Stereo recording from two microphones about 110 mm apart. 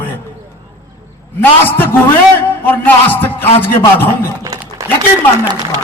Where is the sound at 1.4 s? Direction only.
20° left (ahead or behind).